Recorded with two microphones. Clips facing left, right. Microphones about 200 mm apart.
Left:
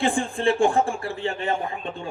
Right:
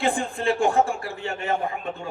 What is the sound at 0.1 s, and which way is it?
A man's voice, 30° left (ahead or behind).